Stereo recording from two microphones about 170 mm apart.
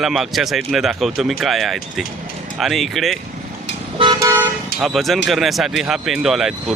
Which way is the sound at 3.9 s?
30° right (ahead or behind).